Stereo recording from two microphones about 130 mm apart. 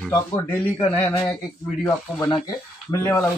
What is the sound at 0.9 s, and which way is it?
Speech, 15° left (ahead or behind).